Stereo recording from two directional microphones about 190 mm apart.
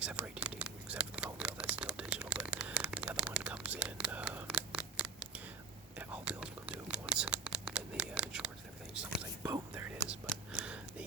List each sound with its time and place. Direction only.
0.0 s a sound: 5° right (ahead or behind)
9.4 s whispering: 15° right (ahead or behind)
10.1 s whispering: 5° right (ahead or behind)